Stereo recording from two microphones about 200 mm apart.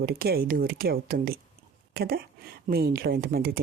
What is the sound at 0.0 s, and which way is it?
Speech, 50° right (ahead or behind).